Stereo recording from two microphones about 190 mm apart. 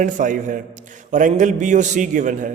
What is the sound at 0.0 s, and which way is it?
A man's voice, 40° right (ahead or behind).